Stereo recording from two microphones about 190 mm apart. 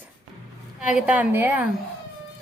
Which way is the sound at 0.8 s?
5° right (ahead or behind).